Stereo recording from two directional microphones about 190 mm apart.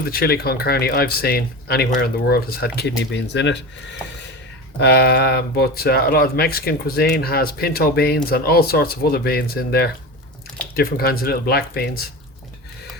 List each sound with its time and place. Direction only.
0.1 s speech: 55° left (ahead or behind)